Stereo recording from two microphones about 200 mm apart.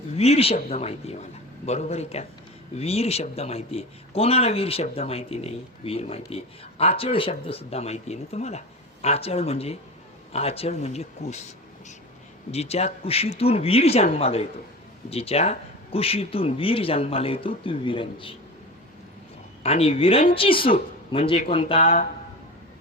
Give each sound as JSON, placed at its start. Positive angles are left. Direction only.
{"t": 0.2, "sound": "a man's voice", "side_deg": 30}
{"t": 12.5, "sound": "a man's voice", "side_deg": 30}
{"t": 19.6, "sound": "a man's voice", "side_deg": 30}